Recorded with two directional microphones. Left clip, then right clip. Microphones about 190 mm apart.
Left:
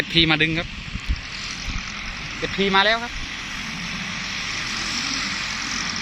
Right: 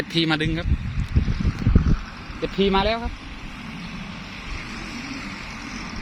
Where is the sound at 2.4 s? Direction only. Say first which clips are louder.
Left 2 dB; 30° right (ahead or behind).